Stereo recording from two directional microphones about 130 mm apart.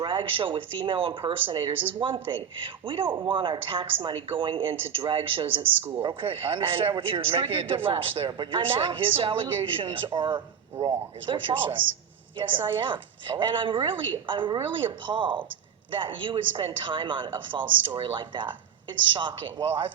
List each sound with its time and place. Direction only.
0.0 s a man's voice: 40° right (ahead or behind)